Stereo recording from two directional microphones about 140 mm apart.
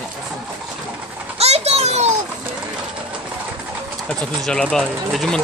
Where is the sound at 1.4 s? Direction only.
45° right (ahead or behind).